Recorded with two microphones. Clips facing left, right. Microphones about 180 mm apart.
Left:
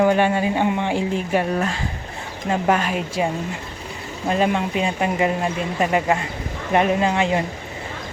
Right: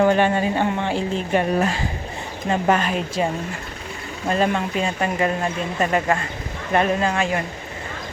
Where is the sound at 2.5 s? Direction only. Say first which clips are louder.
Even; 10° left (ahead or behind).